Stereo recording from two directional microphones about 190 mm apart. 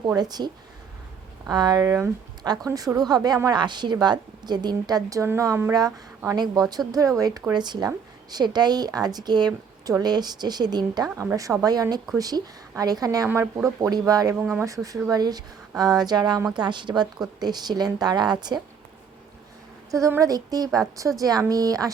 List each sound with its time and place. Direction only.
0.0 s speech: 20° right (ahead or behind)
11.1 s speech: 10° right (ahead or behind)
20.0 s speech: 15° right (ahead or behind)